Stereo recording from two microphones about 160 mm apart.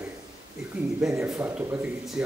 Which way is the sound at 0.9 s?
5° right (ahead or behind).